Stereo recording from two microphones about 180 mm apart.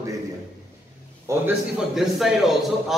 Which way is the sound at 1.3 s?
15° right (ahead or behind).